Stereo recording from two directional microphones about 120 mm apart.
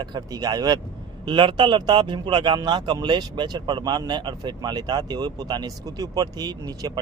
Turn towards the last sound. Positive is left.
turn(degrees=-35)  # may be behind; listen again after turning